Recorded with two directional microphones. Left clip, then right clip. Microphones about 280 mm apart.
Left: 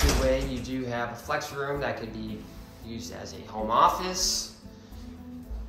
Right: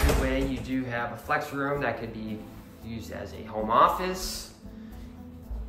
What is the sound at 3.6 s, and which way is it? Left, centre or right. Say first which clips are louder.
Speech: right 1 dB; centre.